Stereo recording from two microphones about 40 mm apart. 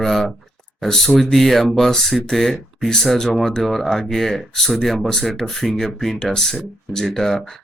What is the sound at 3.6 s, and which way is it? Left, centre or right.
Speech, centre.